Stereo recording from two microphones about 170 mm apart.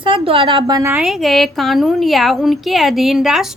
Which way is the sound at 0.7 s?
15° right (ahead or behind).